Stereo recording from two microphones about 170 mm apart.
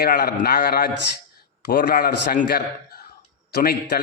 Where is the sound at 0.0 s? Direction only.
55° left (ahead or behind).